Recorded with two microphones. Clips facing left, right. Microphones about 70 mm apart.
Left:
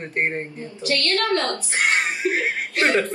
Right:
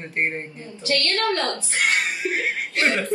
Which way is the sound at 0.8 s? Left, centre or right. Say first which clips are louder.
Even; right.